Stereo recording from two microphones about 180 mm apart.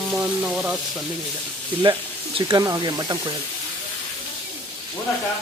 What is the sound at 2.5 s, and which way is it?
Speech, 20° right (ahead or behind).